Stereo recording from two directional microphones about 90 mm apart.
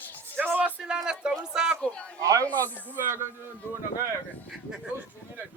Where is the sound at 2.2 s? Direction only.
35° right (ahead or behind).